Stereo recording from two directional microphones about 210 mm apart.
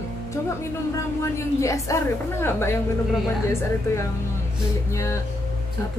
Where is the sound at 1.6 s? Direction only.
15° left (ahead or behind).